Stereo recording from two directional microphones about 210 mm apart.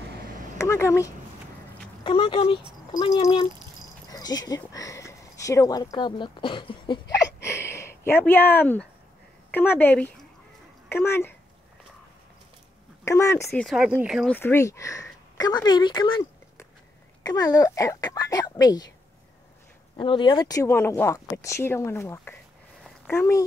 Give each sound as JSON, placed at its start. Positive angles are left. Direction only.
{"t": 0.6, "sound": "speech", "side_deg": 15}
{"t": 2.0, "sound": "speech", "side_deg": 25}
{"t": 7.3, "sound": "a sound", "side_deg": 15}
{"t": 9.5, "sound": "speech", "side_deg": 10}
{"t": 13.0, "sound": "speech", "side_deg": 15}
{"t": 13.5, "sound": "speech", "side_deg": 0}
{"t": 20.0, "sound": "speech", "side_deg": 25}